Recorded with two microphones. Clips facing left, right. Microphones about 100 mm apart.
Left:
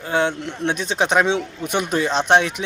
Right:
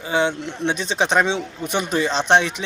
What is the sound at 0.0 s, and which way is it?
Speech, centre (ahead or behind).